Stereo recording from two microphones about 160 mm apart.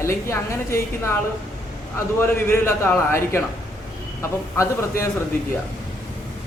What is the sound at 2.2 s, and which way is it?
A man's voice, 15° left (ahead or behind).